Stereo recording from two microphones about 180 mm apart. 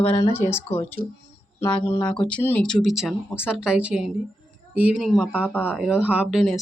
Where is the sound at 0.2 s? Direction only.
15° left (ahead or behind).